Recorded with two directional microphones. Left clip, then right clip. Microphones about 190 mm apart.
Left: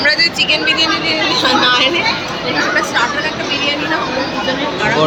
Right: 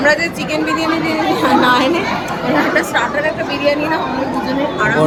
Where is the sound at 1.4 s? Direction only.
50° right (ahead or behind).